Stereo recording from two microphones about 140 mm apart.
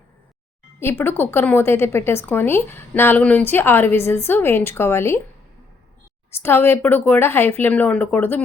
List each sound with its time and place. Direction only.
0.8 s a woman's voice: 15° left (ahead or behind)
6.4 s a woman's voice: 15° left (ahead or behind)